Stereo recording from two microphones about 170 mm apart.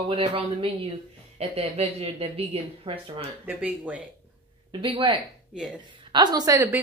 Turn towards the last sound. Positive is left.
turn(degrees=-15)  # may be behind; listen again after turning